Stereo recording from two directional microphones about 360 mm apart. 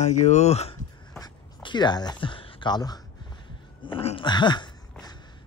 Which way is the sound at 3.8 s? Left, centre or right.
Centre.